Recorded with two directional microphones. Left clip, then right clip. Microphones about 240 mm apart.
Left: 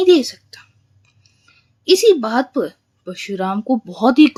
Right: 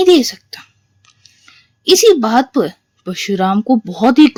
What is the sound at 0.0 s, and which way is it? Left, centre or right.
A woman's voice, right.